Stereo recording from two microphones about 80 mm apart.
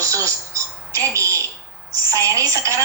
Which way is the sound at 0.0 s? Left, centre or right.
Right.